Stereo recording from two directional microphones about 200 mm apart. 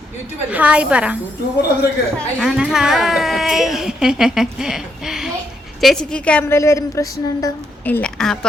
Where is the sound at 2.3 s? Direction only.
5° right (ahead or behind).